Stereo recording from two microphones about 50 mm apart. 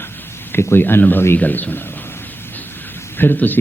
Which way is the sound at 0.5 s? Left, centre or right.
Left.